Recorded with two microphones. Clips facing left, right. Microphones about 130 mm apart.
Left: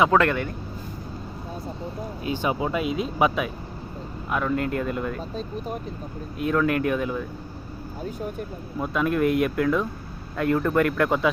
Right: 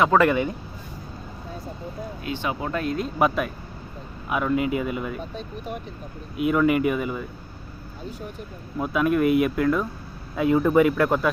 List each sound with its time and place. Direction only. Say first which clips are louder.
0.1 s speech: right 2 dB; 10° right (ahead or behind)
2.5 s speech: left 1 dB; 15° left (ahead or behind); by 5.2 s 5° right (ahead or behind)
5.3 s speech: left 2 dB; 35° left (ahead or behind)
6.3 s speech: right 3 dB; 5° right (ahead or behind)
8.8 s speech: right 2 dB; 5° right (ahead or behind)